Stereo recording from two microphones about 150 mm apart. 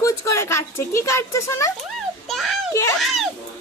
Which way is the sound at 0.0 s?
20° left (ahead or behind).